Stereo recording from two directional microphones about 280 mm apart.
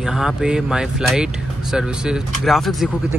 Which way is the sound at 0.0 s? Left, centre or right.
Centre.